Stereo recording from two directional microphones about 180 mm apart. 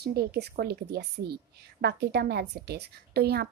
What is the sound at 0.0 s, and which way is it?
A woman's voice, 60° right (ahead or behind).